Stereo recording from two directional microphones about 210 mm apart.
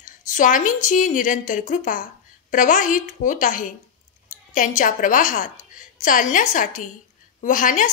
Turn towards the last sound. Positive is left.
turn(degrees=40)  # may be behind; listen again after turning